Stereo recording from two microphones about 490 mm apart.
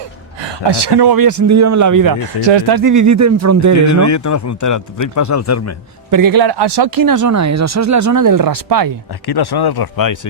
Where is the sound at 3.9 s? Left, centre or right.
Left.